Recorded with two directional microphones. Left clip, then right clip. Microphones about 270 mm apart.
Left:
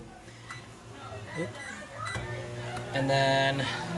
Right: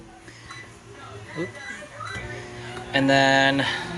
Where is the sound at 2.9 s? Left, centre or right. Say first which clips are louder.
Right 8 dB; centre.